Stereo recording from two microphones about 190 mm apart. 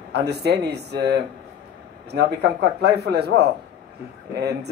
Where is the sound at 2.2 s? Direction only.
60° right (ahead or behind).